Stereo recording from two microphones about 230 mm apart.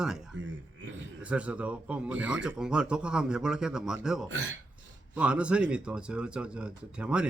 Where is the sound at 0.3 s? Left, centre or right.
Right.